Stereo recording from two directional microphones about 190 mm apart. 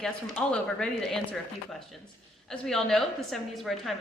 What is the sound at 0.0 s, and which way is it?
A woman's voice, 5° left (ahead or behind).